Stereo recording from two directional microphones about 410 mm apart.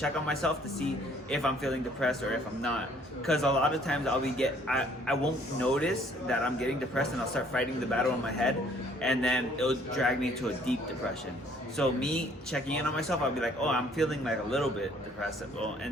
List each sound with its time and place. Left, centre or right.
0.0 s a man's voice: centre
11.8 s a man's voice: centre